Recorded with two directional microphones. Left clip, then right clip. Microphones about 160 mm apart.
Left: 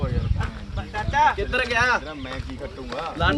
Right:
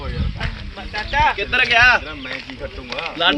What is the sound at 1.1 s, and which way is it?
Speech, 40° right (ahead or behind).